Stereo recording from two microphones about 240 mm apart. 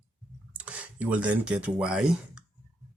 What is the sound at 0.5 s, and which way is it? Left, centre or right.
Speech, centre.